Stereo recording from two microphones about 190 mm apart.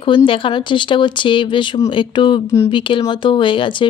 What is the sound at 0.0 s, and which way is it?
Speech, 25° left (ahead or behind).